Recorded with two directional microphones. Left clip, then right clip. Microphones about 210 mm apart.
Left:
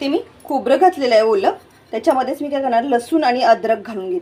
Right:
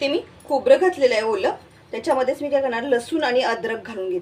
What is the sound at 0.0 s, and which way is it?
A woman's voice, 25° left (ahead or behind).